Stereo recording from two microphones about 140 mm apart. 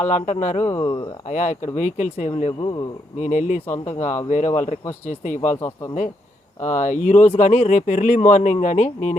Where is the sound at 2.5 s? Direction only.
30° left (ahead or behind).